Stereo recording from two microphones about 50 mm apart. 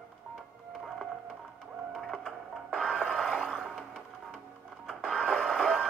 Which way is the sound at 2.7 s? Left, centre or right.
Centre.